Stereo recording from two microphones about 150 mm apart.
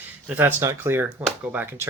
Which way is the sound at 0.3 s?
15° right (ahead or behind).